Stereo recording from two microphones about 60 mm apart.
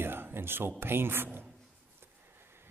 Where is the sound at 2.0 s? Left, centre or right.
Right.